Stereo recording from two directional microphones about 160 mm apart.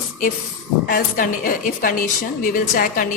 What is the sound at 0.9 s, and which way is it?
Speech, 65° left (ahead or behind).